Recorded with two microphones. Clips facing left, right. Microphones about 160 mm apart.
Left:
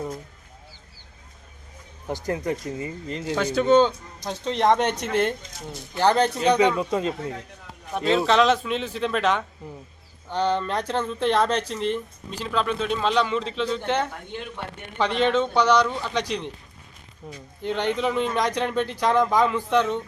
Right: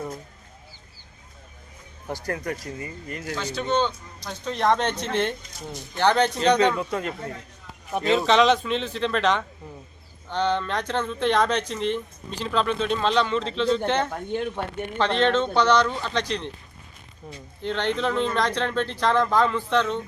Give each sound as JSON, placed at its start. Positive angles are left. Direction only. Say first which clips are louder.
{"t": 2.0, "sound": "speech", "louder": "left 3 dB", "side_deg": 15}
{"t": 3.3, "sound": "a man's voice", "louder": "left 7 dB", "side_deg": 55}
{"t": 4.2, "sound": "speech", "louder": "left 3 dB", "side_deg": 25}
{"t": 7.9, "sound": "speech", "louder": "even", "side_deg": 0}
{"t": 17.2, "sound": "speech", "louder": "left 1 dB", "side_deg": 0}